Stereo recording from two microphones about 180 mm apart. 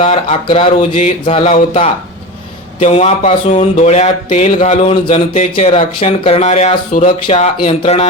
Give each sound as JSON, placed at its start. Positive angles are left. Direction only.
{"t": 0.0, "sound": "speech", "side_deg": 35}